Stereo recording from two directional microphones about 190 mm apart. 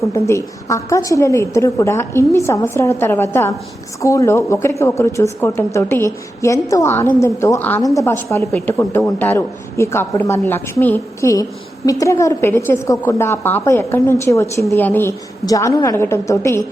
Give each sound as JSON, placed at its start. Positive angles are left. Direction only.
{"t": 0.0, "sound": "a woman's voice", "side_deg": 15}